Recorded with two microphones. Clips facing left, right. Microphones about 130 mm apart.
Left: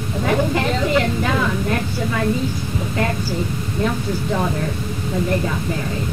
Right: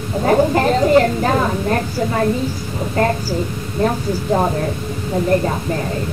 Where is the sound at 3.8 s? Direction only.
40° right (ahead or behind).